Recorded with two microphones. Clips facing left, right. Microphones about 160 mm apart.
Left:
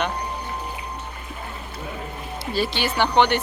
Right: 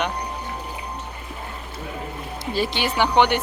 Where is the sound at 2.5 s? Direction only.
15° right (ahead or behind).